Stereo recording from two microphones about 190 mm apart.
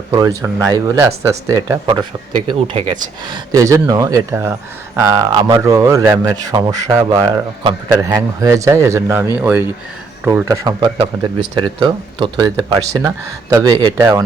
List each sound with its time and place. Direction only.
0.1 s speech: 15° right (ahead or behind)